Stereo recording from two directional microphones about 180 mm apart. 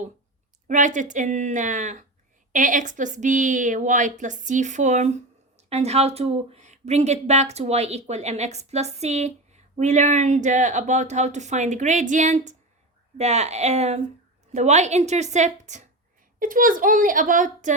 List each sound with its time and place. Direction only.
0.7 s a woman's voice: 45° right (ahead or behind)